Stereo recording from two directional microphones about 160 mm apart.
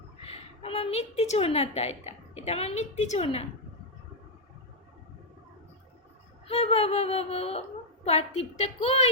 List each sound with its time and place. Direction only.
0.3 s a woman's voice: 40° left (ahead or behind)
6.5 s a woman's voice: 40° left (ahead or behind)